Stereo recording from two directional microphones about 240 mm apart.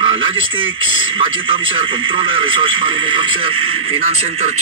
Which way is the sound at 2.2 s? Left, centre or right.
Right.